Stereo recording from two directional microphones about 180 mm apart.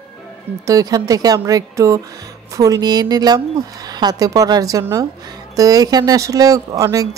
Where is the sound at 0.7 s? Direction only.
20° right (ahead or behind).